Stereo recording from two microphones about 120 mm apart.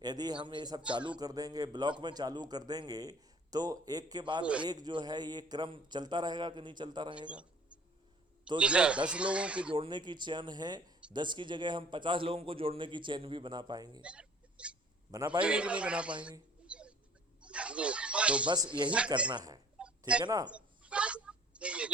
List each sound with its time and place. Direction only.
0.0 s a man's voice: 35° right (ahead or behind)
8.5 s speech: 10° right (ahead or behind)
9.7 s a man's voice: 40° right (ahead or behind)
14.0 s vehicle: 10° right (ahead or behind)
15.4 s speech: 10° right (ahead or behind)
16.6 s a sound: 10° right (ahead or behind)
17.4 s speech: 10° right (ahead or behind)
18.4 s a man's voice: 35° right (ahead or behind)
18.9 s speech: 10° right (ahead or behind)
19.3 s a man's voice: 35° right (ahead or behind)
19.8 s a sound: 5° right (ahead or behind)
20.2 s a man's voice: 35° right (ahead or behind)
20.5 s a sound: 10° right (ahead or behind)